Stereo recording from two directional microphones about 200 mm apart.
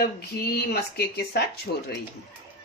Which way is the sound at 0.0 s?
50° left (ahead or behind).